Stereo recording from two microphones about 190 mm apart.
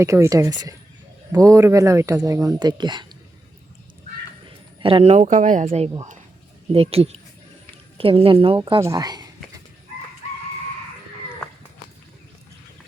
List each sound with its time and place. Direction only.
0.0 s speech: 15° right (ahead or behind)
4.4 s a woman's voice: 25° right (ahead or behind)